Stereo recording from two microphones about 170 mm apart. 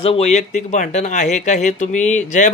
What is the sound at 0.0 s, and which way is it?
Speech, 35° left (ahead or behind).